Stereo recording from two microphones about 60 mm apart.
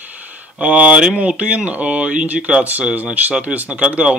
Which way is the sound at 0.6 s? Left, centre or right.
Right.